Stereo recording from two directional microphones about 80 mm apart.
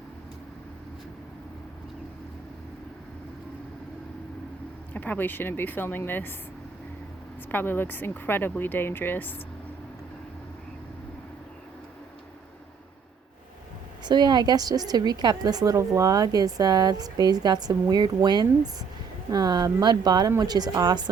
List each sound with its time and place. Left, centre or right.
4.9 s speech: left
7.5 s speech: left
14.0 s a woman's voice: right